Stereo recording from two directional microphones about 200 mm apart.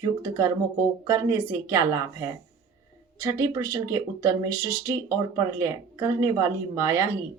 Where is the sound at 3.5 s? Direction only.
15° right (ahead or behind).